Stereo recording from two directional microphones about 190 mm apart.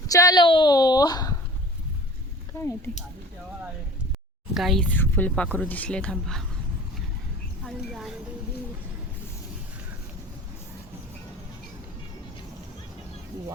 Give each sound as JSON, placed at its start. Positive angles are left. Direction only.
{"t": 0.1, "sound": "a woman's voice", "side_deg": 20}
{"t": 4.5, "sound": "speech", "side_deg": 0}
{"t": 7.6, "sound": "speech", "side_deg": 0}